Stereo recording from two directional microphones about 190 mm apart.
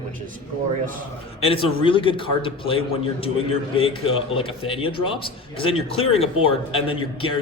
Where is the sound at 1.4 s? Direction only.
30° left (ahead or behind).